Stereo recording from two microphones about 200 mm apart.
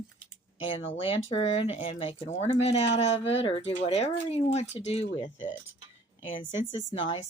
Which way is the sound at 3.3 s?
30° left (ahead or behind).